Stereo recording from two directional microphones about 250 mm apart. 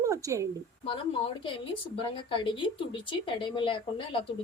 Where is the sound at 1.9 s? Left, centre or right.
Centre.